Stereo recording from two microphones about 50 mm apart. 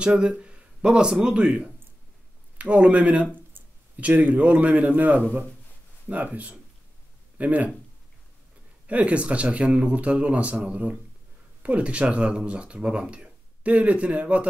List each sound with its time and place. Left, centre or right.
0.0 s speech: right
8.8 s speech: right